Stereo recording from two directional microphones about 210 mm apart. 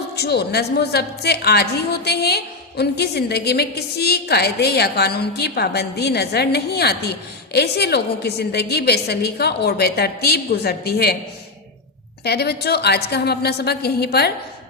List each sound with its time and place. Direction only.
0.2 s a woman's voice: 50° left (ahead or behind)
12.2 s a woman's voice: 50° left (ahead or behind)